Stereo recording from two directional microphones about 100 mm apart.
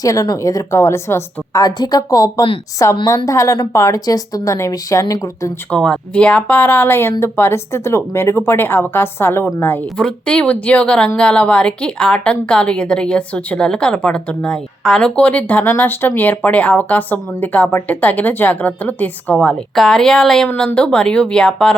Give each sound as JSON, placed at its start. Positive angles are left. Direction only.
{"t": 0.0, "sound": "a woman's voice", "side_deg": 35}
{"t": 2.8, "sound": "a woman's voice", "side_deg": 30}
{"t": 5.7, "sound": "a woman's voice", "side_deg": 10}
{"t": 19.7, "sound": "a woman's voice", "side_deg": 5}